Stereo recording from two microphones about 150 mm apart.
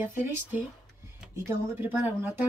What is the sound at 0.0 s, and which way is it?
Speech, 15° right (ahead or behind).